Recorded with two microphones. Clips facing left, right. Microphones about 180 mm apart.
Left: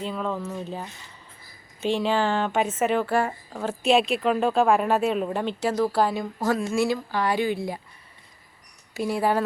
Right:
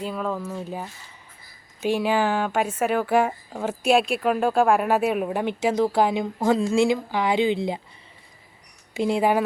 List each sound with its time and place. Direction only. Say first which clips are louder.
0.0 s a woman's voice: right 1 dB; 5° right (ahead or behind); by 7.8 s 20° right (ahead or behind)
9.0 s speech: right 3 dB; 20° right (ahead or behind)